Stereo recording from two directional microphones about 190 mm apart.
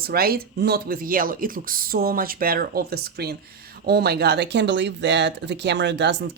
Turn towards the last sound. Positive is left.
turn(degrees=-65)  # may be behind; listen again after turning